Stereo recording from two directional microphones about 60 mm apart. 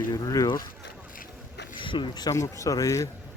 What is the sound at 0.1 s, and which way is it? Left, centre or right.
Speech, left.